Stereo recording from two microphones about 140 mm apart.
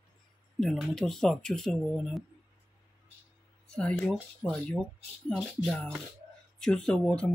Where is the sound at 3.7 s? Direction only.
5° left (ahead or behind).